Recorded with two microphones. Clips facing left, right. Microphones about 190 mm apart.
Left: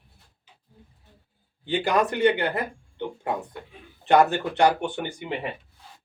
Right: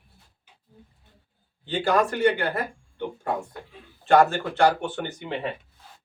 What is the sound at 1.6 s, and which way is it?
Speech, 15° left (ahead or behind).